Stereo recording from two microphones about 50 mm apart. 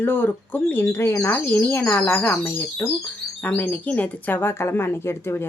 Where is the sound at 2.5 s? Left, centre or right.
Left.